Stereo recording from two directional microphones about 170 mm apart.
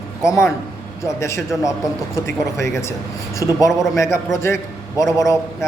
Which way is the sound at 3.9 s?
15° left (ahead or behind).